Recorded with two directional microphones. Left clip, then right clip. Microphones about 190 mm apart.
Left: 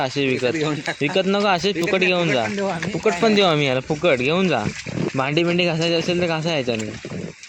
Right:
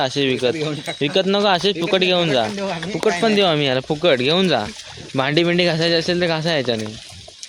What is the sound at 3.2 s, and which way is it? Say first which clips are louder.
Speech: left 1 dB; 25° left (ahead or behind).